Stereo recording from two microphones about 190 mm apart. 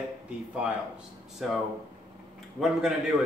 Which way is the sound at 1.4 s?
Centre (ahead or behind).